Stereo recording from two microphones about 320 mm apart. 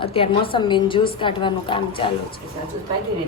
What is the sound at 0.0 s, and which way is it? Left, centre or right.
A woman's voice, centre.